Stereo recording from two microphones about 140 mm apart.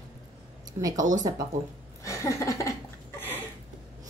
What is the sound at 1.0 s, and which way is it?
Speech, 65° right (ahead or behind).